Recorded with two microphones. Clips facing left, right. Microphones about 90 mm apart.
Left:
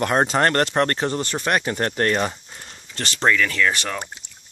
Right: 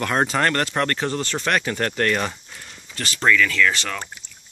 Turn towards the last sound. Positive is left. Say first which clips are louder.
# left 1 dB
turn(degrees=20)  # may be behind; listen again after turning